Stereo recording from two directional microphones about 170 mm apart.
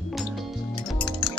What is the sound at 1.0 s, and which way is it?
Music, 30° left (ahead or behind).